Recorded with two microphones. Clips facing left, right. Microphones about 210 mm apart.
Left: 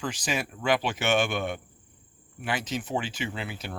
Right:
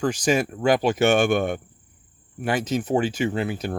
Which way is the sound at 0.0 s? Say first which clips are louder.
Right 10 dB; 45° right (ahead or behind).